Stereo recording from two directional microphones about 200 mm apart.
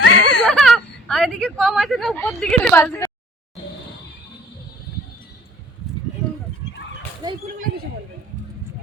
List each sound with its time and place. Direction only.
0.0 s whimper: 75° left (ahead or behind)
0.4 s speech: 5° left (ahead or behind)
7.2 s dog: 20° right (ahead or behind)